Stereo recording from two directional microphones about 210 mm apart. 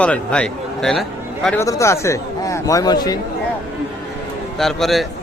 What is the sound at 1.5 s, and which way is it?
A man's voice, 10° left (ahead or behind).